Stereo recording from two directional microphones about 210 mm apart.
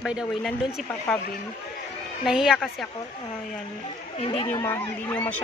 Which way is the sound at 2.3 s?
Centre (ahead or behind).